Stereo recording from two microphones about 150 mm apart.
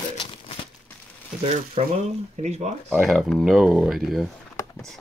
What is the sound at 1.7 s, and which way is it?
Speech, 45° right (ahead or behind).